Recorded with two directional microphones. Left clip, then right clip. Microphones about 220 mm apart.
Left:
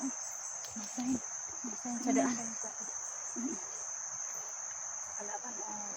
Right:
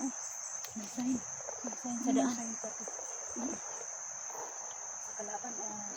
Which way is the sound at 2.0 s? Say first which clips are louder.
Even; 15° left (ahead or behind).